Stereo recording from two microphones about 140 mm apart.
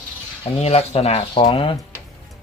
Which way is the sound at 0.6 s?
45° left (ahead or behind).